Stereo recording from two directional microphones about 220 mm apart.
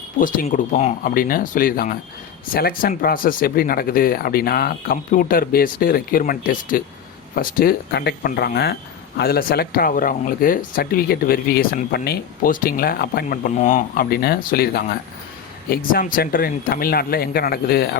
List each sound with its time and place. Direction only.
0.2 s speech: 40° left (ahead or behind)